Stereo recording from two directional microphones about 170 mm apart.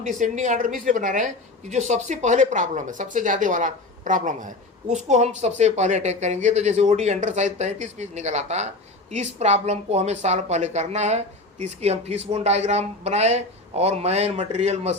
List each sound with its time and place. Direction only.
0.0 s speech: 45° right (ahead or behind)